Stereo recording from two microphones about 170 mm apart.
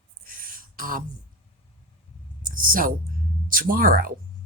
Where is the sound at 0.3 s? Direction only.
55° right (ahead or behind).